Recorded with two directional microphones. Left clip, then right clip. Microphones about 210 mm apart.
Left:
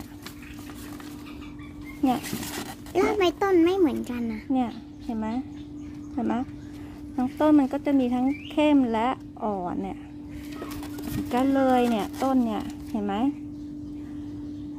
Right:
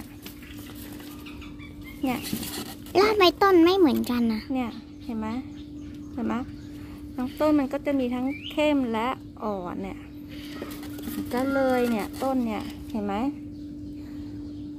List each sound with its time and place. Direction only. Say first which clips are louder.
2.9 s speech: right 4 dB; 10° right (ahead or behind)
4.5 s a woman's voice: left 3 dB; 35° left (ahead or behind)
11.3 s speech: left 2 dB; 40° left (ahead or behind)